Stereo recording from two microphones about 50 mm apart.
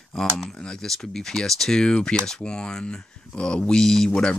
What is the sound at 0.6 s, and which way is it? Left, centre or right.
Speech, centre.